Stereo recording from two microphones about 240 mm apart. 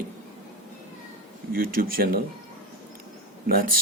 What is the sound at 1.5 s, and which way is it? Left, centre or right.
Speech, right.